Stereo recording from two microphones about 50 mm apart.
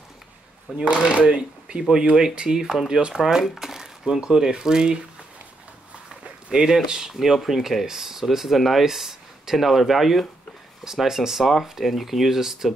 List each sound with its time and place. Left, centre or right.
0.7 s speech: centre
6.2 s speech: centre